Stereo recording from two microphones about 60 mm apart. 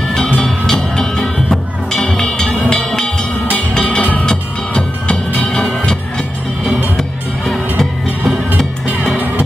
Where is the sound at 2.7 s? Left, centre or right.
Centre.